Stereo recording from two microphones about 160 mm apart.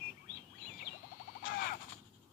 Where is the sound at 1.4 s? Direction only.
65° left (ahead or behind).